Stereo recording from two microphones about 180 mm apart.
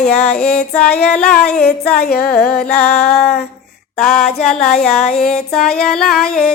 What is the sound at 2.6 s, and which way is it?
Music, 5° left (ahead or behind).